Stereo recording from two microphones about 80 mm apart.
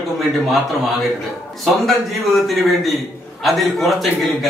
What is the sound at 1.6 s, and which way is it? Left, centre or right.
A man's voice, centre.